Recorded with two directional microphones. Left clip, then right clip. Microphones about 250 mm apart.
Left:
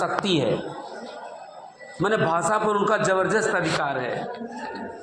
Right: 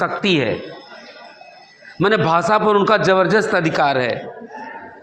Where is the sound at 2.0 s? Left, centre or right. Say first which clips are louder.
Right 6 dB; right.